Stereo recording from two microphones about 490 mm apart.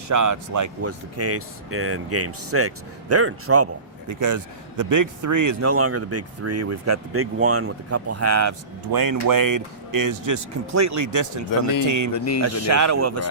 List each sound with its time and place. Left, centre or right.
0.1 s speech: right
12.1 s speech: left
12.4 s speech: right